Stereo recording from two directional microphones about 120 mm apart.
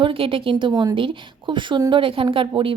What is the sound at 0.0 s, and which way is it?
Speech, 45° right (ahead or behind).